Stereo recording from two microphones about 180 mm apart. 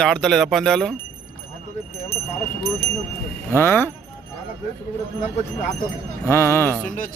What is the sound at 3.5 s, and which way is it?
Speech, 10° left (ahead or behind).